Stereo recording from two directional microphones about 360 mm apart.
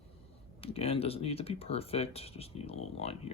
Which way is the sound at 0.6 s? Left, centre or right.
Centre.